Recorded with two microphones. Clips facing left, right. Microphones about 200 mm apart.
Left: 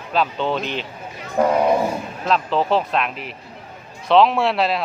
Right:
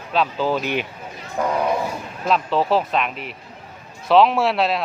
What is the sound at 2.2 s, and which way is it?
Speech, centre (ahead or behind).